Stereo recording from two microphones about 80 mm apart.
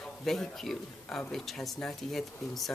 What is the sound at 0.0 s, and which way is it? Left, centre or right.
A man's voice, centre.